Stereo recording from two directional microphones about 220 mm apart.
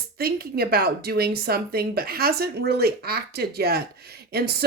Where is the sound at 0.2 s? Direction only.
45° right (ahead or behind).